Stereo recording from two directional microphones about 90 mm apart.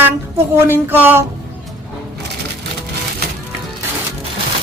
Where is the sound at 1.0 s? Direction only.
25° right (ahead or behind).